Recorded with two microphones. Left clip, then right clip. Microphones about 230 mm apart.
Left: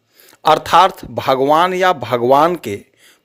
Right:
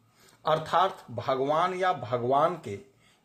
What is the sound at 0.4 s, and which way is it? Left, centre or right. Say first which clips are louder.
A man's voice: left 14 dB; left.